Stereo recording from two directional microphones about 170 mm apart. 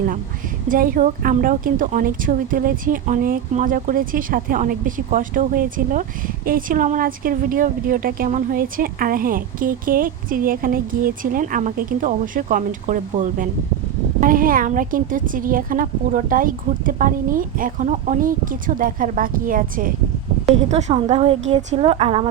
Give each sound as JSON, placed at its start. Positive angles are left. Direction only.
{"t": 0.7, "sound": "a woman's voice", "side_deg": -55}
{"t": 20.5, "sound": "a woman's voice", "side_deg": -40}